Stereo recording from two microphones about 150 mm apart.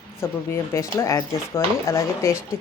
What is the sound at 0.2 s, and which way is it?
Speech, 20° left (ahead or behind).